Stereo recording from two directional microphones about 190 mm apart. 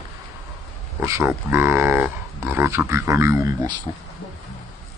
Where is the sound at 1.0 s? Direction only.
15° right (ahead or behind).